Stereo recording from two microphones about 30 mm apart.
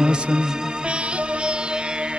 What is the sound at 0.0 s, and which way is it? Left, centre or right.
Music, right.